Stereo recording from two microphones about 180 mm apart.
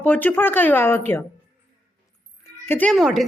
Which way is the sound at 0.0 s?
10° left (ahead or behind).